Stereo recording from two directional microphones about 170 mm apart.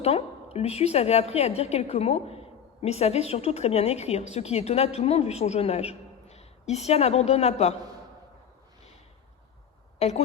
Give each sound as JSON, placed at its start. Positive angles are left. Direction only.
{"t": 0.0, "sound": "a woman's voice", "side_deg": 35}
{"t": 10.0, "sound": "a woman's voice", "side_deg": 40}